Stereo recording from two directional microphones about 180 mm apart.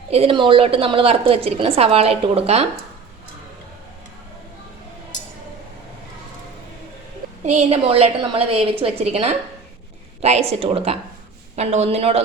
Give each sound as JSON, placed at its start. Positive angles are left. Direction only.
{"t": 0.1, "sound": "a woman's voice", "side_deg": -30}
{"t": 7.4, "sound": "a woman's voice", "side_deg": -35}